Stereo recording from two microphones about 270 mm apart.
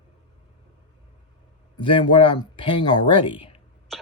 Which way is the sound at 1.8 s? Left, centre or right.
Centre.